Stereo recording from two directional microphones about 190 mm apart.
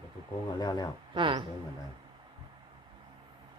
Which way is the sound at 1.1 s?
25° right (ahead or behind).